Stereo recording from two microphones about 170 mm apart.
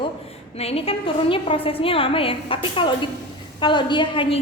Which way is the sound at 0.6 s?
35° left (ahead or behind).